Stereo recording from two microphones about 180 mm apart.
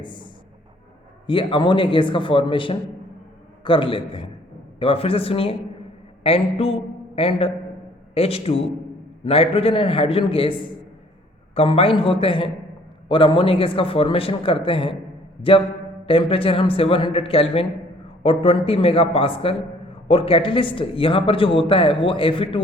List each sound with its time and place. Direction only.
0.0 s speech: 25° left (ahead or behind)
1.3 s a man's voice: 30° left (ahead or behind)